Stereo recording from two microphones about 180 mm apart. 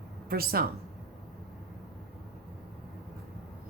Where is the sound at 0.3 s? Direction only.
55° right (ahead or behind).